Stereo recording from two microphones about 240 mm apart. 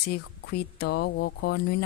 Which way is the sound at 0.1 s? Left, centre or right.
Left.